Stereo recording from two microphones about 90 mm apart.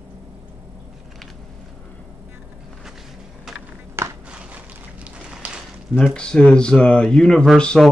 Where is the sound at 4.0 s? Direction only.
30° right (ahead or behind).